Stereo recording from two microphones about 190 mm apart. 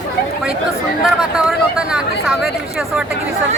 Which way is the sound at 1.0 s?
5° right (ahead or behind).